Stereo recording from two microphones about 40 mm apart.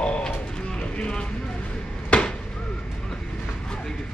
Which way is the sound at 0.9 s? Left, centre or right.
Left.